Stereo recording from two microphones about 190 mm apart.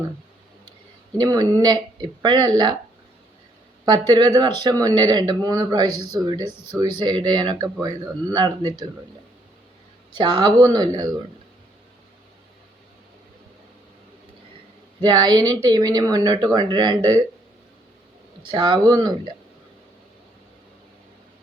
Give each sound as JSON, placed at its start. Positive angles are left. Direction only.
{"t": 1.2, "sound": "speech", "side_deg": -20}
{"t": 3.8, "sound": "speech", "side_deg": -20}
{"t": 10.1, "sound": "speech", "side_deg": -25}
{"t": 15.0, "sound": "speech", "side_deg": -20}
{"t": 18.4, "sound": "speech", "side_deg": -25}